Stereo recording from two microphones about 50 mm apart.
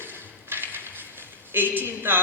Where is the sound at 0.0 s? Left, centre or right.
Right.